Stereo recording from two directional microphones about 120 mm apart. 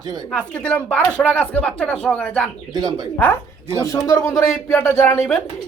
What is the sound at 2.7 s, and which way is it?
Speech, 35° right (ahead or behind).